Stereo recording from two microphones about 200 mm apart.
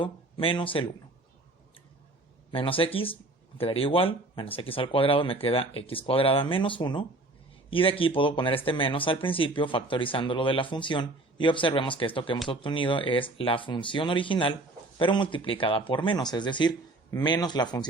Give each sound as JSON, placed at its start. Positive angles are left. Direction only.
{"t": 0.0, "sound": "speech", "side_deg": 25}
{"t": 2.5, "sound": "speech", "side_deg": 25}